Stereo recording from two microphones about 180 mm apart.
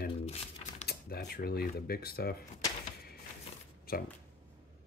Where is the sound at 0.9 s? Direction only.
60° left (ahead or behind).